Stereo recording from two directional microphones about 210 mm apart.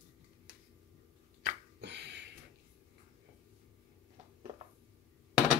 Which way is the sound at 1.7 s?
55° right (ahead or behind).